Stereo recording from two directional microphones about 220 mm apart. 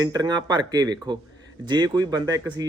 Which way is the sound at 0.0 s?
15° right (ahead or behind).